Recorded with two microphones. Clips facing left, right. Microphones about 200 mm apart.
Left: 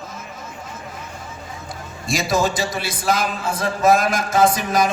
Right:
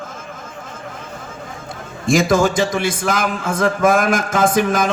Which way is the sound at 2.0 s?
50° right (ahead or behind).